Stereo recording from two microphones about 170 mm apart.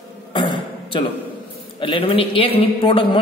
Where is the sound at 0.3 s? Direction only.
30° left (ahead or behind).